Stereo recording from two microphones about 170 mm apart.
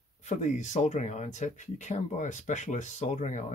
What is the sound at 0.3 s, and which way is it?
Speech, 45° left (ahead or behind).